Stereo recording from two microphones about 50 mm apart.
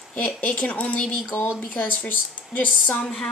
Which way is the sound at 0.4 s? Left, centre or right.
Left.